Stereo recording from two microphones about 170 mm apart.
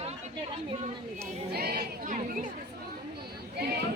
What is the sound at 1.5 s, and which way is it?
Speech, 65° right (ahead or behind).